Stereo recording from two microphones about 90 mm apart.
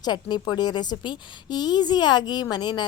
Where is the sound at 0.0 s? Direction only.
50° left (ahead or behind).